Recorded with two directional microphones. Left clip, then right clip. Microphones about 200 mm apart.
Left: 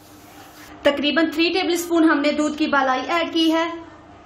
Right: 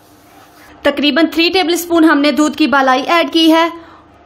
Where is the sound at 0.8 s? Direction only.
45° right (ahead or behind).